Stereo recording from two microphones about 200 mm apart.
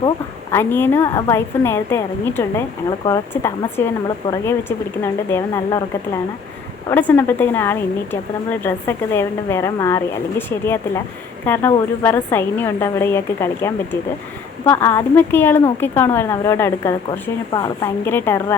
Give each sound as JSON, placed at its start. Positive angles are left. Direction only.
{"t": 0.5, "sound": "a woman's voice", "side_deg": 10}
{"t": 4.2, "sound": "a woman's voice", "side_deg": 25}
{"t": 5.0, "sound": "a woman's voice", "side_deg": 15}
{"t": 7.1, "sound": "a woman's voice", "side_deg": 10}